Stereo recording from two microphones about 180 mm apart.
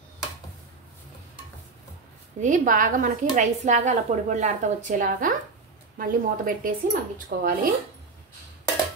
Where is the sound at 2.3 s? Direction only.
45° right (ahead or behind).